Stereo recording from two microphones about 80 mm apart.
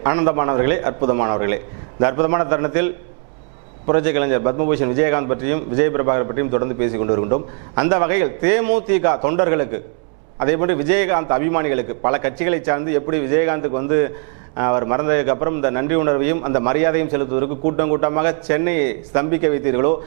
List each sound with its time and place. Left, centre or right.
0.0 s a man's voice: centre